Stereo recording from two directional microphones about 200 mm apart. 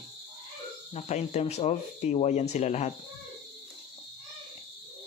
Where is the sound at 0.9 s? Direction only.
35° left (ahead or behind).